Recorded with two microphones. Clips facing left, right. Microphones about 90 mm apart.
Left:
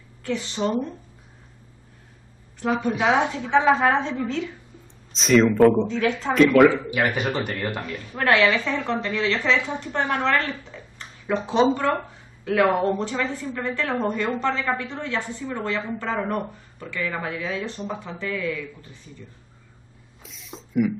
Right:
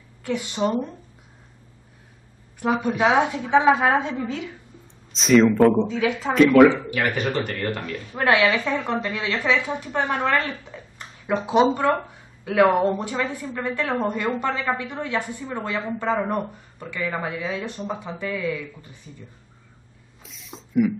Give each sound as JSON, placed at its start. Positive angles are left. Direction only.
{"t": 0.2, "sound": "a woman's voice", "side_deg": -15}
{"t": 2.6, "sound": "a woman's voice", "side_deg": -15}
{"t": 6.9, "sound": "speech", "side_deg": 15}
{"t": 8.1, "sound": "a woman's voice", "side_deg": -10}
{"t": 20.2, "sound": "a sound", "side_deg": 0}